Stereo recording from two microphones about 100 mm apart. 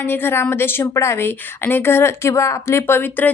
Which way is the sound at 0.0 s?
20° left (ahead or behind).